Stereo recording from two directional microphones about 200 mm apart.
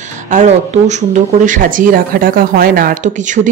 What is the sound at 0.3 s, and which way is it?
Speech, 35° right (ahead or behind).